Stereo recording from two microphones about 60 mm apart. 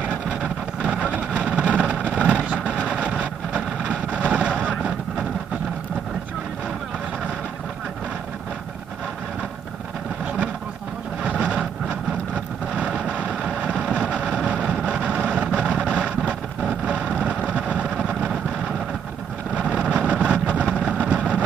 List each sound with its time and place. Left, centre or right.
0.1 s vehicle: centre
11.2 s vehicle: centre
19.5 s vehicle: centre